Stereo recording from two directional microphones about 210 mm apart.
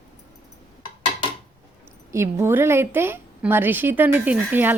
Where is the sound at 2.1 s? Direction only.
10° right (ahead or behind).